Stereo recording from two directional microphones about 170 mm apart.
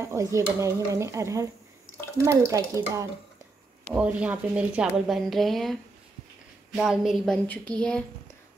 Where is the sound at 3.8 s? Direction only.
5° right (ahead or behind).